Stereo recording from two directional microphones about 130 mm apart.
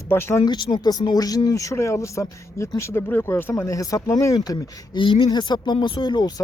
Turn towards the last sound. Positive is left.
turn(degrees=35)  # may be behind; listen again after turning